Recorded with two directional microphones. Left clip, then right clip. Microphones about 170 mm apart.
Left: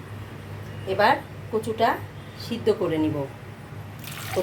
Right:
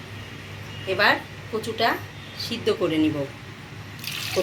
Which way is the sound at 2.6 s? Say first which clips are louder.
Even; 15° left (ahead or behind).